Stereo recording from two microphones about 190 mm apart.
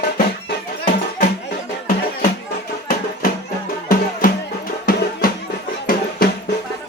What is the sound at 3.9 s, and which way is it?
Music, 50° left (ahead or behind).